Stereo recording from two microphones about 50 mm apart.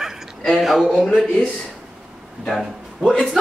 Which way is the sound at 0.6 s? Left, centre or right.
Centre.